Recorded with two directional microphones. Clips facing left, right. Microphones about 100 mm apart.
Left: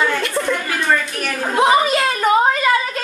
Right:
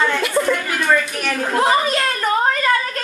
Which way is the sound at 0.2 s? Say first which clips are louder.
Right 2 dB; 5° right (ahead or behind).